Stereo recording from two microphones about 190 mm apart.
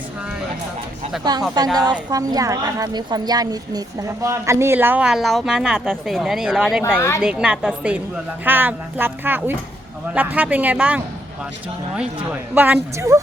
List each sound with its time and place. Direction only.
1.2 s a woman's voice: 20° right (ahead or behind); by 6.8 s centre (ahead or behind)
6.8 s a woman's voice: 10° left (ahead or behind)
7.2 s a woman's voice: 5° right (ahead or behind)
12.5 s a woman's voice: 10° right (ahead or behind)